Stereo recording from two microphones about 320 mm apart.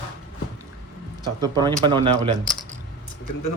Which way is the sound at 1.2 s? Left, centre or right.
Centre.